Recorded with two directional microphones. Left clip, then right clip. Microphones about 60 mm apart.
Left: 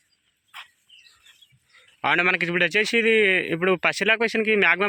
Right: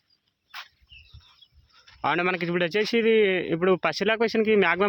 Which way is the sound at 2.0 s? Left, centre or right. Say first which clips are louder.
Left 4 dB; right.